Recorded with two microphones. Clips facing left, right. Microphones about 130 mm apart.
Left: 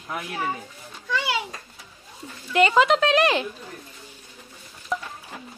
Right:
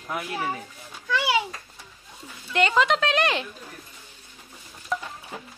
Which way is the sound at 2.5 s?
Centre (ahead or behind).